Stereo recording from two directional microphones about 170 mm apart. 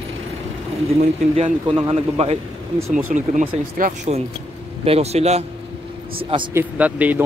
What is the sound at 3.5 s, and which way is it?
Speech, 40° right (ahead or behind).